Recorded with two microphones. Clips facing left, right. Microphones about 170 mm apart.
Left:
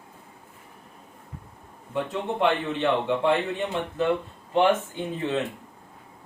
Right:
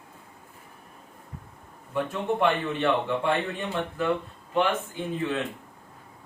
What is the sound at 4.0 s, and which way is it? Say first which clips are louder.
Speech: left 3 dB; 25° left (ahead or behind).